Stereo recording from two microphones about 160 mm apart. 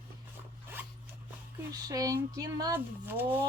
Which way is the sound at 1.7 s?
25° right (ahead or behind).